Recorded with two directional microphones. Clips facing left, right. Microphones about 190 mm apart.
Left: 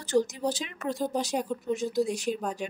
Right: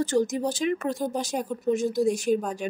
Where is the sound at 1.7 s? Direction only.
50° right (ahead or behind).